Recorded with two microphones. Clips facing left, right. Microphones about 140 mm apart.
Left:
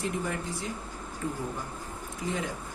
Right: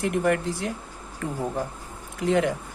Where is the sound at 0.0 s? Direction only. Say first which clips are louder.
Right 9 dB; 70° right (ahead or behind).